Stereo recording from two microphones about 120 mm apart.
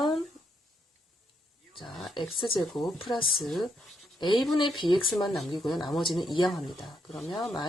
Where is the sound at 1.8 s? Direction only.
Centre (ahead or behind).